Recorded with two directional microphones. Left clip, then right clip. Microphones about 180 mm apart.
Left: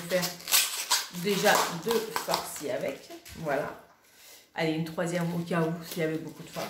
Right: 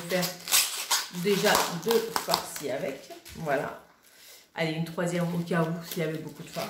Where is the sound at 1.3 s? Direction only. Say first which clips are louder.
Right 3 dB; centre (ahead or behind).